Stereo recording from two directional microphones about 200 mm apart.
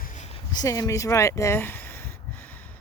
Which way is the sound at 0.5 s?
20° left (ahead or behind).